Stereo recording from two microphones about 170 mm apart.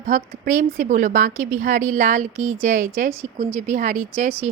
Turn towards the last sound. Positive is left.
turn(degrees=-45)  # may be behind; listen again after turning